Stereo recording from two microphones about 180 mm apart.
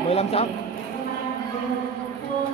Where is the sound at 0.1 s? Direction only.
35° left (ahead or behind).